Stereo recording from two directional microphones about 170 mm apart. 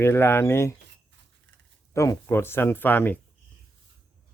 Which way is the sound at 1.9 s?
15° left (ahead or behind).